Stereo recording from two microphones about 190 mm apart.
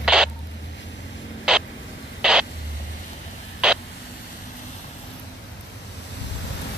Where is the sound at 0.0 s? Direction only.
5° right (ahead or behind).